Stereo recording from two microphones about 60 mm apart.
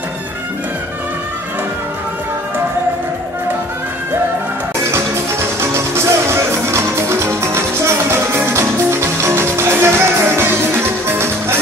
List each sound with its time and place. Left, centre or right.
5.6 s music: right